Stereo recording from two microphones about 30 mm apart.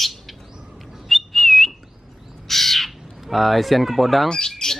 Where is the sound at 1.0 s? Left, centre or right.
Centre.